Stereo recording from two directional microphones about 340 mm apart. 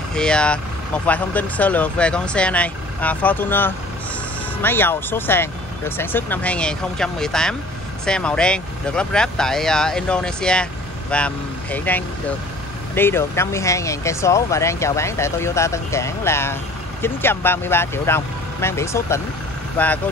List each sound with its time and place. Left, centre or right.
0.1 s speech: centre